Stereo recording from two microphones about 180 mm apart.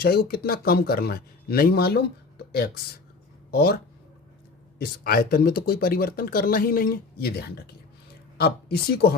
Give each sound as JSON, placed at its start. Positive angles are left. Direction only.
{"t": 0.0, "sound": "speech", "side_deg": 60}
{"t": 3.5, "sound": "speech", "side_deg": 60}
{"t": 4.8, "sound": "speech", "side_deg": 55}